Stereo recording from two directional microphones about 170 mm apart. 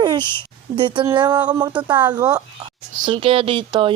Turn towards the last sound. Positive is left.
turn(degrees=-30)  # may be behind; listen again after turning